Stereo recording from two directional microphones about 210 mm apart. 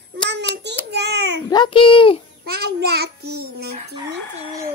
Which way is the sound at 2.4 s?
50° right (ahead or behind).